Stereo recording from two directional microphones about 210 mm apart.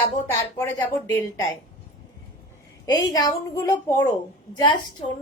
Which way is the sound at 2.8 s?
20° left (ahead or behind).